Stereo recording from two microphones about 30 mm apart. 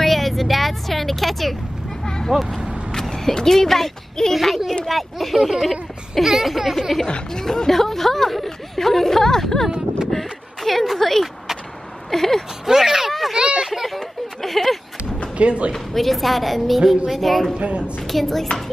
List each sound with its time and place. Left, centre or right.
0.0 s speech: centre
2.0 s a sound: left
3.4 s a woman's voice: centre
6.2 s a sound: centre
7.3 s speech: left
7.7 s speech: centre
12.6 s a sound: centre
13.4 s speech: right
13.8 s speech: centre
15.3 s a man's voice: right
15.7 s a woman's voice: centre
17.6 s a woman's voice: right
18.0 s speech: centre